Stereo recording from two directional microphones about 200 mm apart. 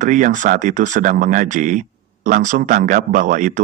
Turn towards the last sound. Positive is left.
turn(degrees=-40)  # may be behind; listen again after turning